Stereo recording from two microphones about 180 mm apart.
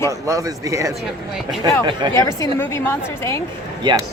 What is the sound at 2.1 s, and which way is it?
A woman's voice, 15° left (ahead or behind).